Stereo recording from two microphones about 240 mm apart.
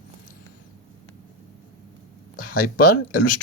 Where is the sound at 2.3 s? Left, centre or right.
Left.